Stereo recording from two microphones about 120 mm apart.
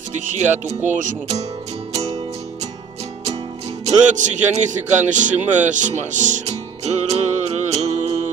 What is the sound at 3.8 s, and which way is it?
Speech, 90° right.